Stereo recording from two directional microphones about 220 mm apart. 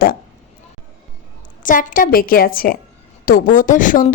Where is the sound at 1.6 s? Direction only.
35° left (ahead or behind).